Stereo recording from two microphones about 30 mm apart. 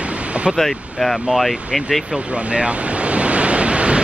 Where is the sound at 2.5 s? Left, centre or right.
Right.